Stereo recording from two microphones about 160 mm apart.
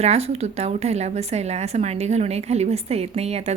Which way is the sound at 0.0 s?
40° right (ahead or behind).